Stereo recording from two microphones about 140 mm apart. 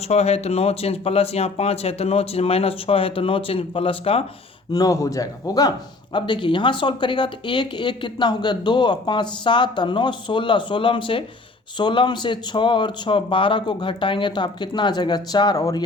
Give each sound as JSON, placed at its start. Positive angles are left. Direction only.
{"t": 0.1, "sound": "speech", "side_deg": 50}
{"t": 4.7, "sound": "speech", "side_deg": 25}